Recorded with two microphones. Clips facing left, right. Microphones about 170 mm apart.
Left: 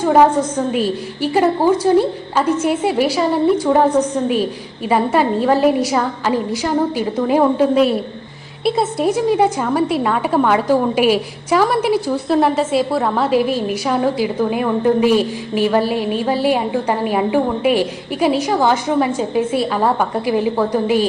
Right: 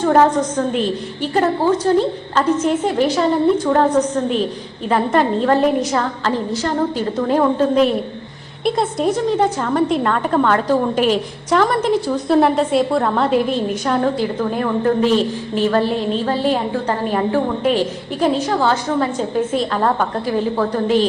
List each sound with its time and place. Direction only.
0.0 s a woman's voice: 10° left (ahead or behind)